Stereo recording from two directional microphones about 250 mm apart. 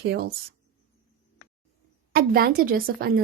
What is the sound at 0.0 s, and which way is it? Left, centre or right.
Speech, right.